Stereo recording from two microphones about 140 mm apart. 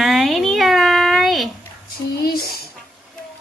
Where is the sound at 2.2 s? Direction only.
90° left.